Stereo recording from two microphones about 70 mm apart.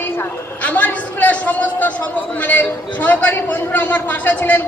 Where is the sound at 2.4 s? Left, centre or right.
Left.